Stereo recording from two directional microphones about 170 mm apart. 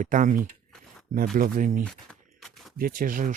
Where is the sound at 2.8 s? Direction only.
55° right (ahead or behind).